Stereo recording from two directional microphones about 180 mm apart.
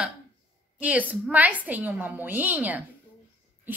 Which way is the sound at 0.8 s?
10° right (ahead or behind).